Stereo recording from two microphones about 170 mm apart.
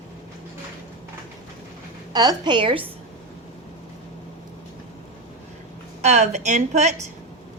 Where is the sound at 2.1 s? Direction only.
25° right (ahead or behind).